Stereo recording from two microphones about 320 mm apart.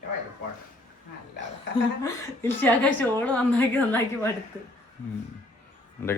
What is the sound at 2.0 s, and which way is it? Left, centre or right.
A man's voice, centre.